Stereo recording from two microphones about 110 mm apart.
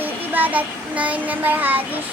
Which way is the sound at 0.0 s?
15° right (ahead or behind).